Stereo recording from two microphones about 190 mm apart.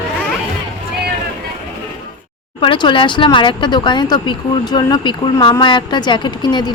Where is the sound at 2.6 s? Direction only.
25° left (ahead or behind).